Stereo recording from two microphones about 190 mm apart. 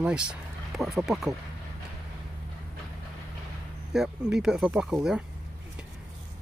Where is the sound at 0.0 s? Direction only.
5° right (ahead or behind).